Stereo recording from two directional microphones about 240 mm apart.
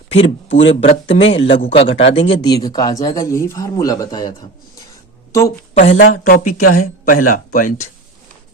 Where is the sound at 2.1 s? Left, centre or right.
Left.